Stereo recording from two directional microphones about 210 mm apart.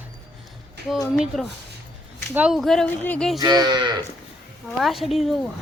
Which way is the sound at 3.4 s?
20° right (ahead or behind).